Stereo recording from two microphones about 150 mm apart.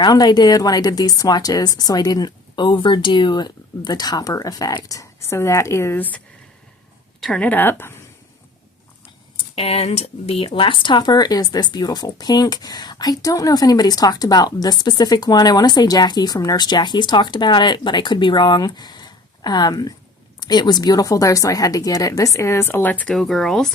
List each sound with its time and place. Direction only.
0.0 s speech: 25° left (ahead or behind)
9.6 s speech: 40° left (ahead or behind); by 23.7 s centre (ahead or behind)